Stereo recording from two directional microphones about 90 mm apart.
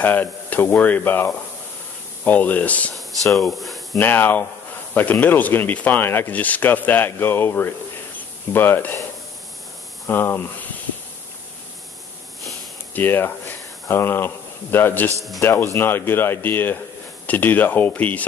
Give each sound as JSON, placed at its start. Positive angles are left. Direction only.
{"t": 0.0, "sound": "speech", "side_deg": 20}
{"t": 3.3, "sound": "speech", "side_deg": 0}
{"t": 4.0, "sound": "speech", "side_deg": 20}
{"t": 10.0, "sound": "speech", "side_deg": 25}
{"t": 12.9, "sound": "speech", "side_deg": 25}